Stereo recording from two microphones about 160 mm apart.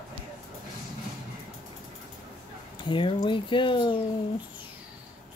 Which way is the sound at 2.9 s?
30° left (ahead or behind).